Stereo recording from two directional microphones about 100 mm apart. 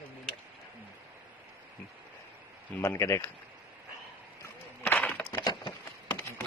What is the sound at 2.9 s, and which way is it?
Speech, 30° left (ahead or behind).